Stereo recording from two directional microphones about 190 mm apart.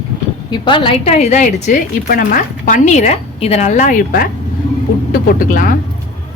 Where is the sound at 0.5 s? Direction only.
25° left (ahead or behind); by 5.7 s 45° left (ahead or behind).